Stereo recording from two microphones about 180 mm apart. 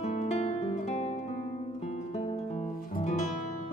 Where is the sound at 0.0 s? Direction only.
35° left (ahead or behind).